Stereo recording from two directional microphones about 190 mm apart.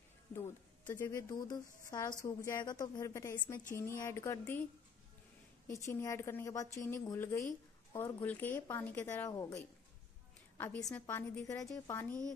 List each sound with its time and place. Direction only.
0.4 s a woman's voice: 10° left (ahead or behind)
5.7 s a woman's voice: 15° left (ahead or behind)
10.6 s a woman's voice: 10° left (ahead or behind)